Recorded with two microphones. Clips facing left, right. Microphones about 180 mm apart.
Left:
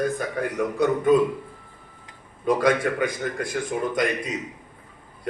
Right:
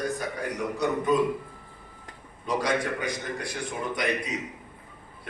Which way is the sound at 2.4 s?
55° left (ahead or behind).